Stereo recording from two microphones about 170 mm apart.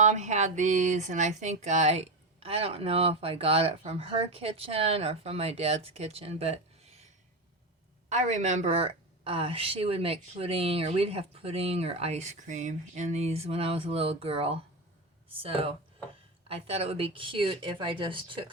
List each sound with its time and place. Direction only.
0.0 s speech: 45° right (ahead or behind)
8.1 s speech: 45° right (ahead or behind)